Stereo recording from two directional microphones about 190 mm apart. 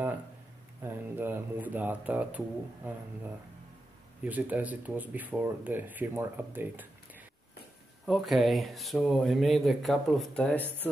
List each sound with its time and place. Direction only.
0.8 s speech: 10° right (ahead or behind)
4.2 s speech: 10° right (ahead or behind)
10.6 s speech: 10° right (ahead or behind)